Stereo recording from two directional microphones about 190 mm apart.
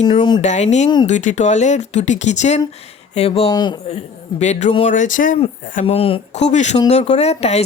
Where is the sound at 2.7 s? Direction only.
35° left (ahead or behind).